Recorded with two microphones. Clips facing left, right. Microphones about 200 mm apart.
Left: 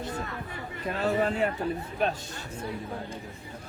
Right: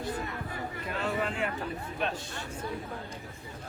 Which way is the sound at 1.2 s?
40° left (ahead or behind).